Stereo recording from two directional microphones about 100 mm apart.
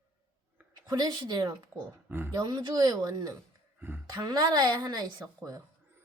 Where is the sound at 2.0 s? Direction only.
20° right (ahead or behind).